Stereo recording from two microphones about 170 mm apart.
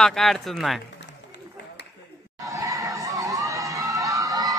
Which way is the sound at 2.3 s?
20° right (ahead or behind).